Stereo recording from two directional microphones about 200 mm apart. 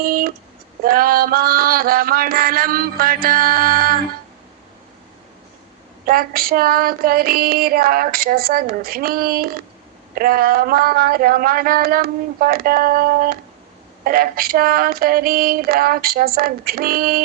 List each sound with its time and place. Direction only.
0.0 s a sound: 45° right (ahead or behind)
0.9 s mantra: 45° right (ahead or behind)
6.1 s child singing: 45° right (ahead or behind)